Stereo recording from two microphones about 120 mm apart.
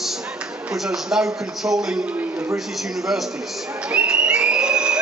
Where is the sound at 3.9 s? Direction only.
10° right (ahead or behind).